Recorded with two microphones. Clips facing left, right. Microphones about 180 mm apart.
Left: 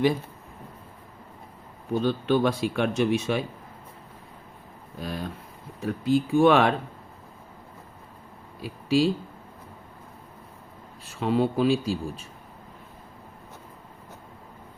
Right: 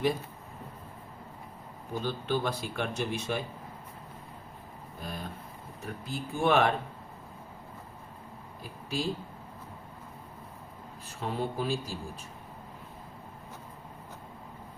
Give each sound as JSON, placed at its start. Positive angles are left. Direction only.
{"t": 1.9, "sound": "speech", "side_deg": 70}
{"t": 4.9, "sound": "a sound", "side_deg": 90}
{"t": 5.8, "sound": "speech", "side_deg": 90}
{"t": 8.6, "sound": "speech", "side_deg": 90}
{"t": 11.0, "sound": "speech", "side_deg": 80}